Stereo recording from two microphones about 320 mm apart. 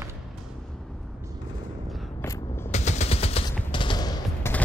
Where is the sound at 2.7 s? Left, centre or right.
Left.